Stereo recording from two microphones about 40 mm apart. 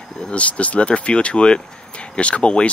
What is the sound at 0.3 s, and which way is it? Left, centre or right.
Speech, left.